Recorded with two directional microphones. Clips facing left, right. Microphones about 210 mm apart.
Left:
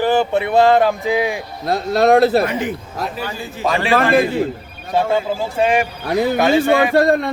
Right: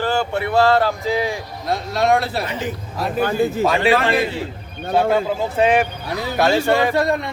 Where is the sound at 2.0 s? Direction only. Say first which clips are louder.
Left 7 dB; 40° left (ahead or behind).